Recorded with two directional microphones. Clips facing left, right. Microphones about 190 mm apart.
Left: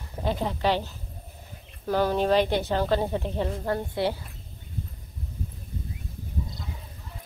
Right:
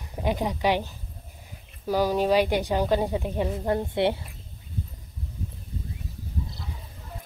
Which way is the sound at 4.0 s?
25° right (ahead or behind).